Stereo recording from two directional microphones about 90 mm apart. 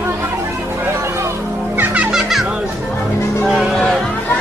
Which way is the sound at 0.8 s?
30° right (ahead or behind).